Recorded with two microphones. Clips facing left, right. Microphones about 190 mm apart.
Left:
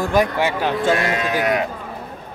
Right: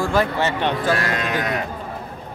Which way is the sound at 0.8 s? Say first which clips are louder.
Left 5 dB; 20° left (ahead or behind).